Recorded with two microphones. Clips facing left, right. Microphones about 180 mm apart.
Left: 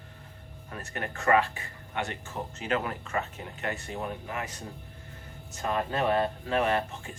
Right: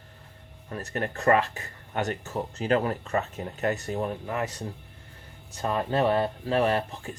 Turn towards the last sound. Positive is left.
turn(degrees=-35)  # may be behind; listen again after turning